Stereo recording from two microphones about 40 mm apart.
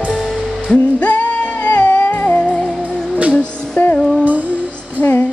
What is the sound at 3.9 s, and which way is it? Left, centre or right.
Music, left.